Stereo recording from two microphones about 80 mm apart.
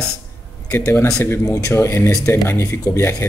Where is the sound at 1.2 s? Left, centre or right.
Left.